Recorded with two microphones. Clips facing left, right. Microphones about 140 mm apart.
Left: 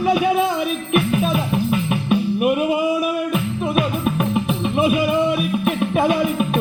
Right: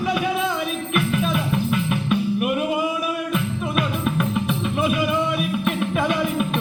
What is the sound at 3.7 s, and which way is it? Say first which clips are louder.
Music: left 3 dB; 45° left (ahead or behind).